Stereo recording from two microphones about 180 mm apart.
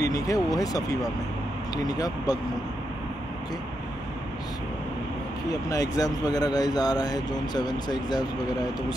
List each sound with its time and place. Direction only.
0.0 s speech: 20° left (ahead or behind)
5.5 s speech: 20° left (ahead or behind)